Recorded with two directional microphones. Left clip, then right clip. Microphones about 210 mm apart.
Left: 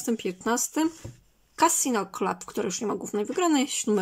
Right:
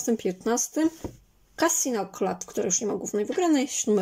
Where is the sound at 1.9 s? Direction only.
15° left (ahead or behind).